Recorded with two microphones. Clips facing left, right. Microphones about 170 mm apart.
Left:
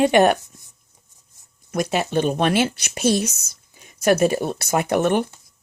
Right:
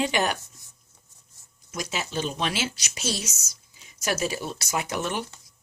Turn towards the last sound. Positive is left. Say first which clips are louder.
# left 11 dB
turn(degrees=55)  # may be behind; listen again after turning